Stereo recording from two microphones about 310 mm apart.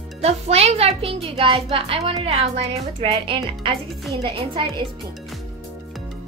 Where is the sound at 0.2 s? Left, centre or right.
Centre.